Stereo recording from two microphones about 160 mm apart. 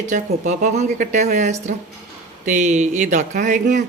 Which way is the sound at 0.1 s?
50° right (ahead or behind).